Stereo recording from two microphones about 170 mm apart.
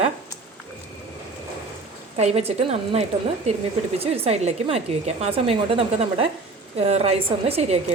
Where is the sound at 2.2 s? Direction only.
40° right (ahead or behind).